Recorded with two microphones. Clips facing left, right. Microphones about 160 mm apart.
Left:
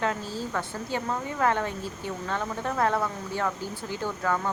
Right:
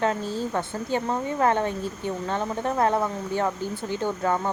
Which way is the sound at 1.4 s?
25° right (ahead or behind).